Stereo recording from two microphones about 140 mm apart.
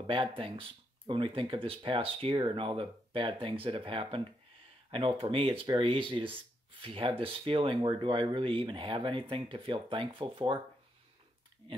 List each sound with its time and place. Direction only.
0.0 s speech: 40° right (ahead or behind)
11.6 s speech: 40° right (ahead or behind)